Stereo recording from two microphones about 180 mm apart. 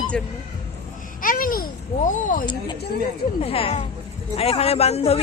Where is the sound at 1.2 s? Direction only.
50° left (ahead or behind).